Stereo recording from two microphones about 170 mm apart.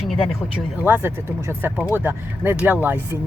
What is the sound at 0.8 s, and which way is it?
Speech, 10° right (ahead or behind).